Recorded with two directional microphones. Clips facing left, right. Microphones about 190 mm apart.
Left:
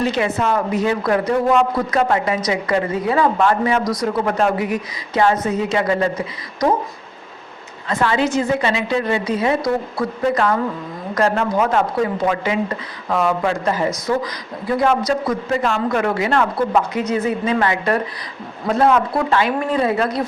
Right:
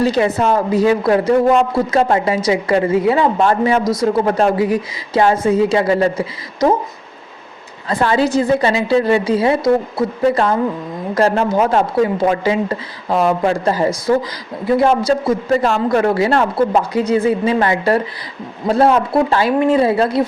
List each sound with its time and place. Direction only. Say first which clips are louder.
0.0 s speech: right 4 dB; 35° right (ahead or behind)
7.9 s a man's voice: right 3 dB; 35° right (ahead or behind)